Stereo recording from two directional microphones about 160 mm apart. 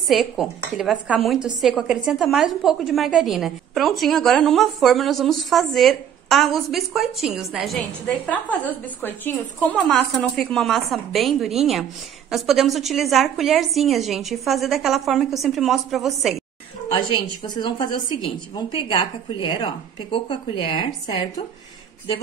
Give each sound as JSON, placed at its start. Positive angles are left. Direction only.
{"t": 0.1, "sound": "a woman's voice", "side_deg": 0}
{"t": 9.0, "sound": "a woman's voice", "side_deg": 10}
{"t": 16.9, "sound": "a woman's voice", "side_deg": 35}